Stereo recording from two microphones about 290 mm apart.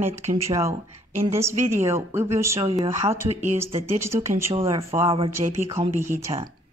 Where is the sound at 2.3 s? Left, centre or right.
Centre.